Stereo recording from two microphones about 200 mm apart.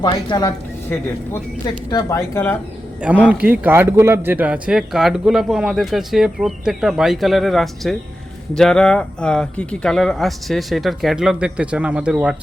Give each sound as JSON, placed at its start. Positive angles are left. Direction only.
{"t": 0.0, "sound": "a woman's voice", "side_deg": 20}
{"t": 1.6, "sound": "speech", "side_deg": 15}
{"t": 3.0, "sound": "a man's voice", "side_deg": -5}